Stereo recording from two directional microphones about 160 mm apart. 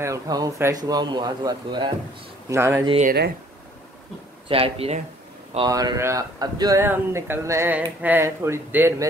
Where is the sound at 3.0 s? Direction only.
85° right.